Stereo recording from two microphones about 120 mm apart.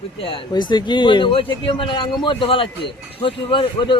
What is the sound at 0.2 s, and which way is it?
A man's voice, 45° left (ahead or behind).